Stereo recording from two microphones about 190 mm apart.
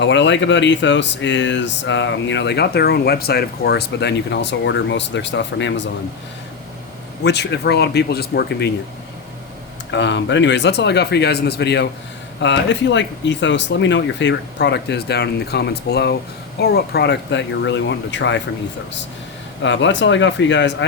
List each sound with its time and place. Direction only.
0.0 s speech: 70° left (ahead or behind)
7.3 s speech: 65° left (ahead or behind)
9.9 s speech: 70° left (ahead or behind)
19.6 s speech: 70° left (ahead or behind)